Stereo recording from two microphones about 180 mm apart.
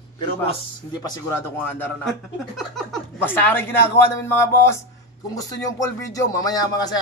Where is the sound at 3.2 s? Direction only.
10° left (ahead or behind).